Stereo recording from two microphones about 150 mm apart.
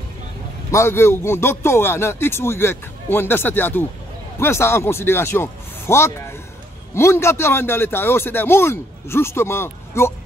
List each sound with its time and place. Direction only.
0.7 s a man's voice: 20° left (ahead or behind)